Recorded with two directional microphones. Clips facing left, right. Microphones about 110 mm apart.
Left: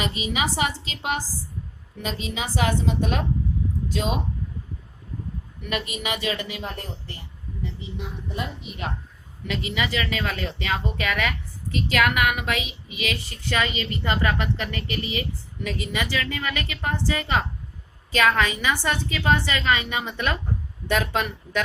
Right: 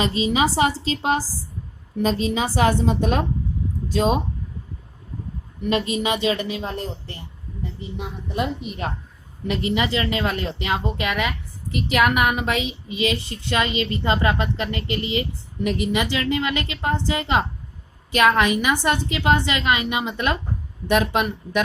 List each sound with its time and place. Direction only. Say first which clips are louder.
0.0 s a woman's voice: right 6 dB; 30° right (ahead or behind)
5.6 s speech: right 7 dB; 25° right (ahead or behind)
9.7 s a woman's voice: right 3 dB; 25° right (ahead or behind)